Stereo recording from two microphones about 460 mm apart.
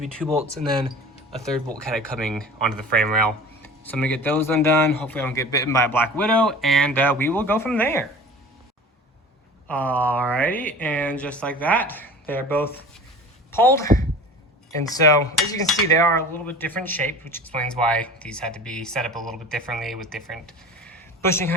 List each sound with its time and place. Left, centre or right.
0.0 s speech: centre
1.4 s speech: centre
9.6 s speech: centre
13.8 s speech: centre
14.9 s speech: centre